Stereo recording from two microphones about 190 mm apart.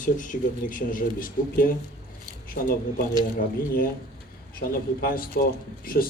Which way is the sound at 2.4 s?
50° left (ahead or behind).